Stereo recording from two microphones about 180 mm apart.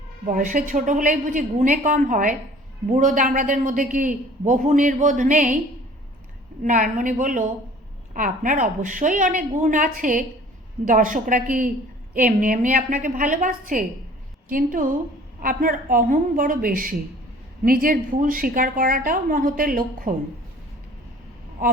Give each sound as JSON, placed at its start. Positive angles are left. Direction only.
{"t": 0.3, "sound": "a man's voice", "side_deg": -50}
{"t": 6.6, "sound": "a man's voice", "side_deg": -45}